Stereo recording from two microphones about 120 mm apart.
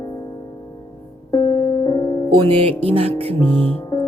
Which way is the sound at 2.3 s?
50° right (ahead or behind).